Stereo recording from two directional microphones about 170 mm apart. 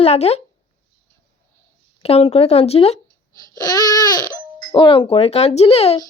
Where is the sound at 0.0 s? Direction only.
40° left (ahead or behind).